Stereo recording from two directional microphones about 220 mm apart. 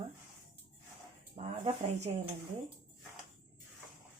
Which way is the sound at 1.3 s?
25° right (ahead or behind).